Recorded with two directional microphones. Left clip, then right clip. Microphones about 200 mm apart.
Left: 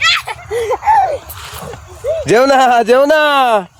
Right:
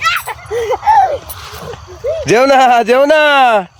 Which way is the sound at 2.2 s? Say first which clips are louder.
Right 1 dB; 5° right (ahead or behind).